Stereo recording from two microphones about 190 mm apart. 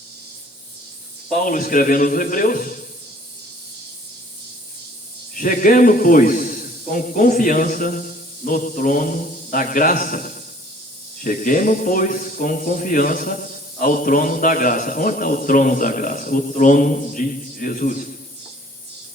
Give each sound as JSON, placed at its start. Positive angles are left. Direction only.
{"t": 1.4, "sound": "speech", "side_deg": 45}
{"t": 5.3, "sound": "a man's voice", "side_deg": 45}